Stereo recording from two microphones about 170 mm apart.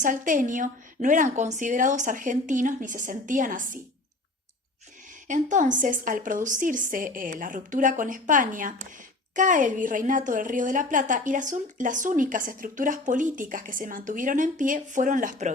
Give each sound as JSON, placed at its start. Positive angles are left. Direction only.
{"t": 0.0, "sound": "speech", "side_deg": -50}
{"t": 5.3, "sound": "speech", "side_deg": -50}